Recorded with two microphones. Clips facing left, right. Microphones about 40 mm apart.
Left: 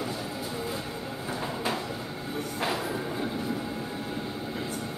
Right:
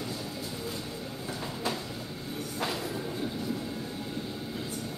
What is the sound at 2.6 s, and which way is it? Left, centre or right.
Train, left.